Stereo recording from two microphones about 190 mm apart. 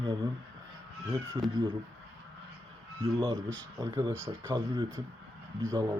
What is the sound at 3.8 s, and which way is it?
Speech, 20° right (ahead or behind).